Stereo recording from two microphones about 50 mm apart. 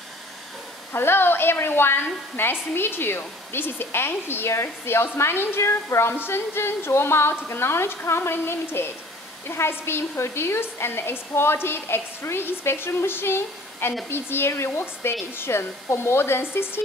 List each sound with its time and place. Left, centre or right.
0.9 s a woman's voice: left
4.5 s a woman's voice: left
5.6 s a woman's voice: left